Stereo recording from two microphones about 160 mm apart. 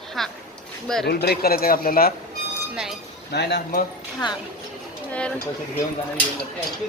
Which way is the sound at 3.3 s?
90° left.